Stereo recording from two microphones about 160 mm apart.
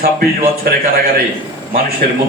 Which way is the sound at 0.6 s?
65° right (ahead or behind).